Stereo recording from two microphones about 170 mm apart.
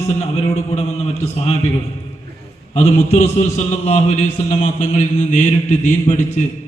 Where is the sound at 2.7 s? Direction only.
40° left (ahead or behind).